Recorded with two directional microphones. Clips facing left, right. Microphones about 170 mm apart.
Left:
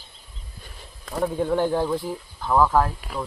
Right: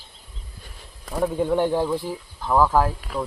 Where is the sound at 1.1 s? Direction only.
5° right (ahead or behind).